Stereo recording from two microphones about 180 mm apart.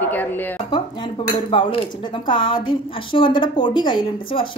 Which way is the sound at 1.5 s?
30° left (ahead or behind).